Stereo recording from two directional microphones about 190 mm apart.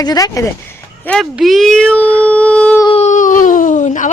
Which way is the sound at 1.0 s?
5° left (ahead or behind).